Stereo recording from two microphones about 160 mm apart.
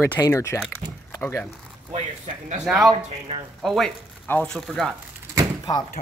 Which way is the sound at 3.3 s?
45° right (ahead or behind).